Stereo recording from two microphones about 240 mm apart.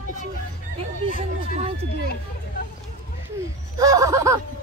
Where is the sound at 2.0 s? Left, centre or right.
Left.